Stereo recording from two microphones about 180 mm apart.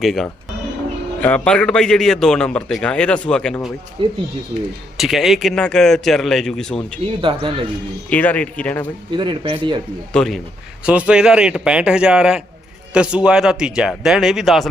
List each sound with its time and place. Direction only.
0.0 s a man's voice: centre (ahead or behind)
4.0 s a man's voice: 30° right (ahead or behind)
4.9 s a man's voice: centre (ahead or behind)
7.2 s a man's voice: 30° right (ahead or behind)
8.1 s speech: 10° left (ahead or behind)
9.1 s a man's voice: 25° right (ahead or behind)
10.1 s a man's voice: 5° left (ahead or behind)